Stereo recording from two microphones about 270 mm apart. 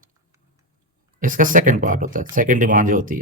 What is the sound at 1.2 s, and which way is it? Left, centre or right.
A man's voice, right.